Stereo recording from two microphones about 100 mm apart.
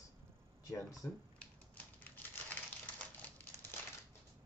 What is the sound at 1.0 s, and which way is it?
Speech, 15° left (ahead or behind).